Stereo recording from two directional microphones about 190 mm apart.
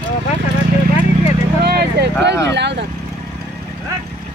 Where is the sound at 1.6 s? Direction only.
60° right (ahead or behind).